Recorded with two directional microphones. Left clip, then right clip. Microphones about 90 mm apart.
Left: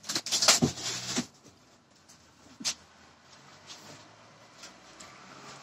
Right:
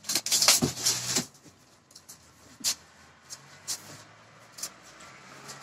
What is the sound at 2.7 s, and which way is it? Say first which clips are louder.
Vehicle: right 3 dB; 35° left (ahead or behind).